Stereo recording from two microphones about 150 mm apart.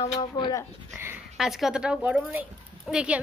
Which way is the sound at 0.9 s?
15° right (ahead or behind).